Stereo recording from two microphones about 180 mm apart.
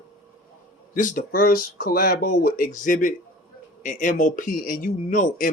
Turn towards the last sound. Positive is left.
turn(degrees=45)  # may be behind; listen again after turning